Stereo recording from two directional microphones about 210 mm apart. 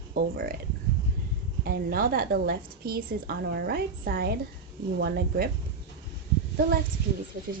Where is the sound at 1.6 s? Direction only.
45° right (ahead or behind).